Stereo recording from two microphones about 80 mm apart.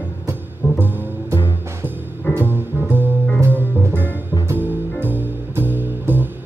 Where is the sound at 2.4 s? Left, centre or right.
Right.